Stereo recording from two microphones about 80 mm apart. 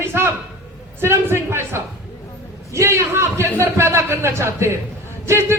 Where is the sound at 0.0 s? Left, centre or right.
Right.